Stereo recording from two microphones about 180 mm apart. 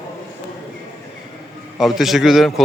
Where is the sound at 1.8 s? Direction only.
Centre (ahead or behind).